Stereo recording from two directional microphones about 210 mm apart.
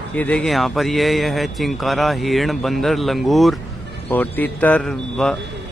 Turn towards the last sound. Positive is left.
turn(degrees=0)  # may be behind; listen again after turning